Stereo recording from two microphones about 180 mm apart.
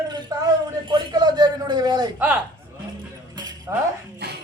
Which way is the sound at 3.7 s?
15° right (ahead or behind).